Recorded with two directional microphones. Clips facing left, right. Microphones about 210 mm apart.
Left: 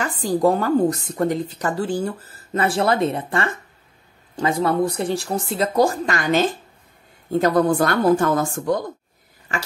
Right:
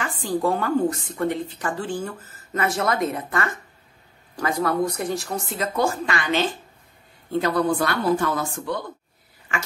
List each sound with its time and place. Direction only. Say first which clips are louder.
0.0 s a woman's voice: left 5 dB; 40° left (ahead or behind)